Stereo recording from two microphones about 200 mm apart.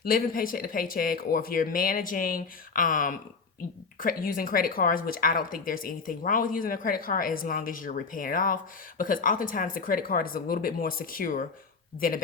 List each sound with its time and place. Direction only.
0.0 s speech: 45° left (ahead or behind)